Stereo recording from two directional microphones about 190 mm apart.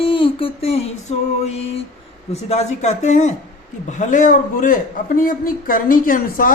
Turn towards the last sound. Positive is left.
turn(degrees=50)  # may be behind; listen again after turning